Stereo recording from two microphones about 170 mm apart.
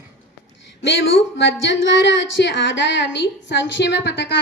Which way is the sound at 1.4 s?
90° left.